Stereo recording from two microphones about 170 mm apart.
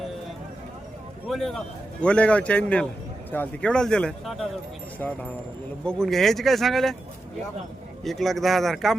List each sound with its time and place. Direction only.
1.3 s a man's voice: centre (ahead or behind)
8.0 s speech: centre (ahead or behind)